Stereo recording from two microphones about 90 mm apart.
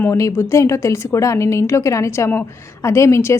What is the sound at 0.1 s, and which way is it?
Speech, 35° left (ahead or behind).